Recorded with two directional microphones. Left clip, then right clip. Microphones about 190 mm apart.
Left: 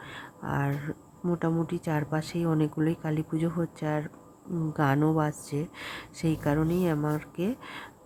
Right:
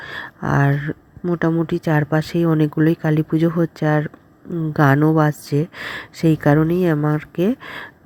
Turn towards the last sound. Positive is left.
turn(degrees=-20)  # may be behind; listen again after turning